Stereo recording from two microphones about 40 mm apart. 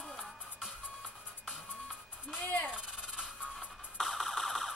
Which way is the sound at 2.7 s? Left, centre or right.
Right.